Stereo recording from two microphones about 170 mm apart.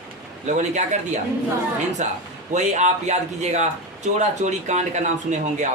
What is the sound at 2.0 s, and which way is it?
Speech, 45° right (ahead or behind).